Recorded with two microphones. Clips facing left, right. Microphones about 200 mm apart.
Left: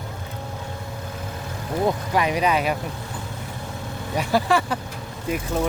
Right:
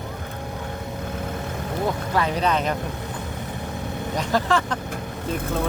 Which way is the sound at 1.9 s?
15° left (ahead or behind).